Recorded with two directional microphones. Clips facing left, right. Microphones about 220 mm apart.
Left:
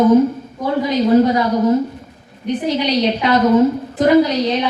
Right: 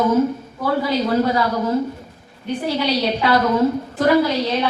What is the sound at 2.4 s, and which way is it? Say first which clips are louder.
A woman's voice: left 3 dB; 20° left (ahead or behind).